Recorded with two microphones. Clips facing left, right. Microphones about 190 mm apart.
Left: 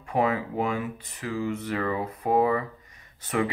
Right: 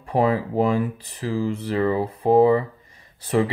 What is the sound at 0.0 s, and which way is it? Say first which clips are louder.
Speech: right 5 dB; 35° right (ahead or behind).